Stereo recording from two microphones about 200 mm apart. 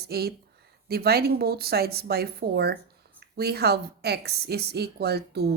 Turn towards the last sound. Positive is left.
turn(degrees=-55)  # may be behind; listen again after turning